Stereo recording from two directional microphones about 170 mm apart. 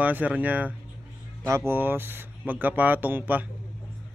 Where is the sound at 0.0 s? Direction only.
10° right (ahead or behind).